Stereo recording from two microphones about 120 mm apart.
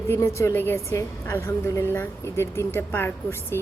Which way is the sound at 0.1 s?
25° left (ahead or behind).